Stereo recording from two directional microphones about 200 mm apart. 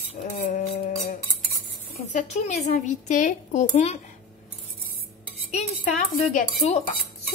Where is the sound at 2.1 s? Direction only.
35° left (ahead or behind).